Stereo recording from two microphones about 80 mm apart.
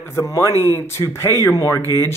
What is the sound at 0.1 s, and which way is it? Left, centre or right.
Speech, left.